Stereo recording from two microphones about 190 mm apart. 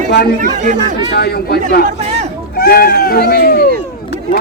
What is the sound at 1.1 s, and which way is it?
A man's voice, 55° left (ahead or behind).